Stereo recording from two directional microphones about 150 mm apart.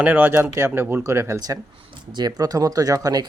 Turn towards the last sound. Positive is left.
turn(degrees=-25)  # may be behind; listen again after turning